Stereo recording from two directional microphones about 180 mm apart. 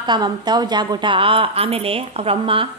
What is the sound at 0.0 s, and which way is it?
A woman's voice, 25° right (ahead or behind).